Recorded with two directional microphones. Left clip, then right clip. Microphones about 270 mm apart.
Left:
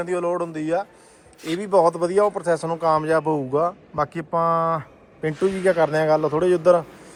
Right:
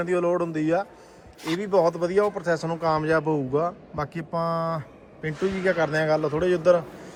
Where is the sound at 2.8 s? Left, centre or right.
Centre.